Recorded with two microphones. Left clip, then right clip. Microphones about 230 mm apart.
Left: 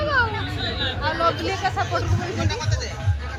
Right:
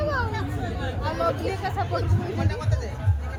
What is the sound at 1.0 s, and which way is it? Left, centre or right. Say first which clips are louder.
Speech: left 3 dB; left.